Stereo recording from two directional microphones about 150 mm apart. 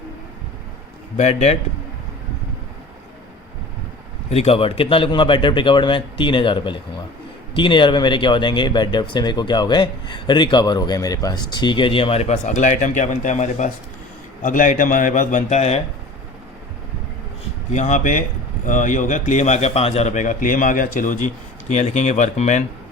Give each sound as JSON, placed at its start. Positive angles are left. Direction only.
{"t": 1.1, "sound": "speech", "side_deg": 50}
{"t": 4.3, "sound": "speech", "side_deg": 40}
{"t": 17.7, "sound": "speech", "side_deg": 55}